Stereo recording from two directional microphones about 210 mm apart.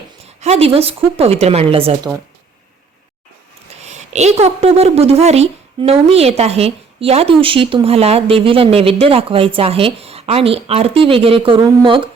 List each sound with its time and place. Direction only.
0.3 s a woman's voice: 30° right (ahead or behind)
3.8 s a woman's voice: 35° right (ahead or behind)